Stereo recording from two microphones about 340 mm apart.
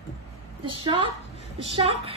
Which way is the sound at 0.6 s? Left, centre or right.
Centre.